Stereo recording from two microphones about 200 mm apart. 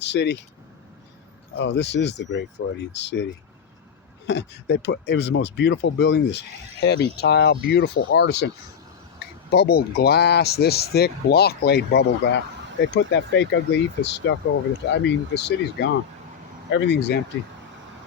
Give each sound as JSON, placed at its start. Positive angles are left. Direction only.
{"t": 0.0, "sound": "speech", "side_deg": 60}
{"t": 1.5, "sound": "speech", "side_deg": 60}
{"t": 4.3, "sound": "speech", "side_deg": 60}
{"t": 9.5, "sound": "speech", "side_deg": 50}